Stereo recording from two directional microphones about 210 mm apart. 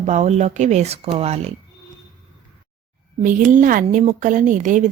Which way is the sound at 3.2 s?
40° right (ahead or behind).